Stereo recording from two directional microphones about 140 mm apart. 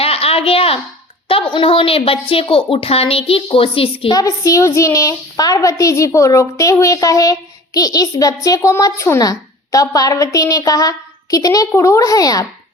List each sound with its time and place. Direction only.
0.0 s a sound: 45° left (ahead or behind)
1.3 s a woman's voice: 40° left (ahead or behind)
4.1 s a woman's voice: 25° left (ahead or behind)